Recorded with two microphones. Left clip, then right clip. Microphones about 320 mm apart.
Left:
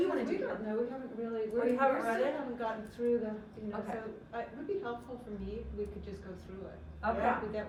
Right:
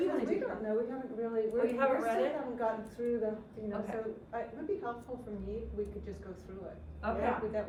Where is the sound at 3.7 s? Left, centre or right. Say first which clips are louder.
Even; centre.